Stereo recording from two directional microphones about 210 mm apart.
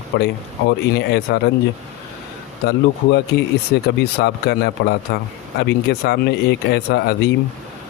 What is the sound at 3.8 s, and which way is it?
Speech, 50° left (ahead or behind).